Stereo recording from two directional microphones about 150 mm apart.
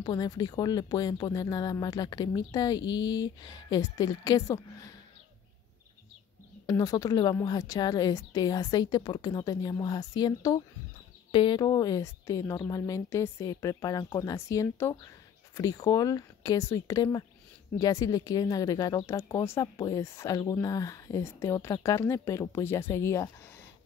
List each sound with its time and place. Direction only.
0.0 s speech: 25° left (ahead or behind)
6.6 s speech: 25° left (ahead or behind)